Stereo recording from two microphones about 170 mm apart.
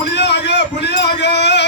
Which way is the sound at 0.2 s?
90° left.